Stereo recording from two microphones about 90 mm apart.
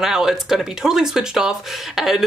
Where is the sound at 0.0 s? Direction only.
5° right (ahead or behind).